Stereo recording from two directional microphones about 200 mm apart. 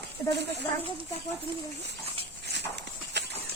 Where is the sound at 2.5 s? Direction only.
60° right (ahead or behind).